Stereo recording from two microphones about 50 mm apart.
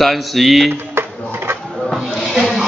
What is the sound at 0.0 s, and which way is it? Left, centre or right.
Speech, centre.